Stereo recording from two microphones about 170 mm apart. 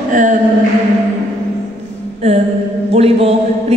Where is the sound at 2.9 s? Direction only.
35° right (ahead or behind).